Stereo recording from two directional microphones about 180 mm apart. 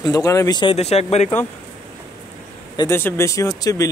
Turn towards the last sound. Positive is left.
turn(degrees=20)  # may be behind; listen again after turning